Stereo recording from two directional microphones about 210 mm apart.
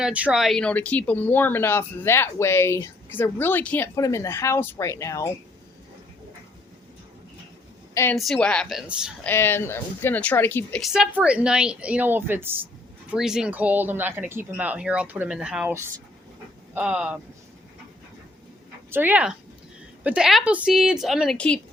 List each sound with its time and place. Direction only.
0.0 s speech: 5° right (ahead or behind); by 5.3 s 15° left (ahead or behind)
8.1 s a woman's voice: centre (ahead or behind)
9.2 s a woman's voice: 10° left (ahead or behind)
18.9 s a woman's voice: 10° right (ahead or behind)